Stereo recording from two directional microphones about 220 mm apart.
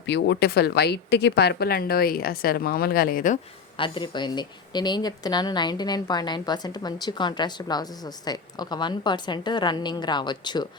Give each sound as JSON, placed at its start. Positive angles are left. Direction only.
{"t": 0.0, "sound": "speech", "side_deg": 55}
{"t": 3.8, "sound": "speech", "side_deg": 20}